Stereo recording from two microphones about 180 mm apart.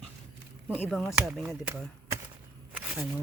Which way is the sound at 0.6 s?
5° right (ahead or behind).